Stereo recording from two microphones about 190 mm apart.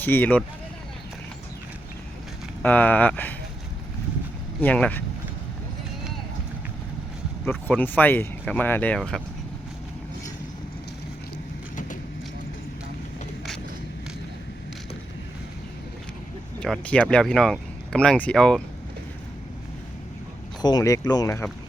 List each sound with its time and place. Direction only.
0.0 s speech: 10° left (ahead or behind)
2.6 s speech: 10° left (ahead or behind)
4.6 s speech: 5° left (ahead or behind)
7.4 s speech: 10° left (ahead or behind)
16.6 s speech: 5° left (ahead or behind)
20.6 s speech: 20° left (ahead or behind)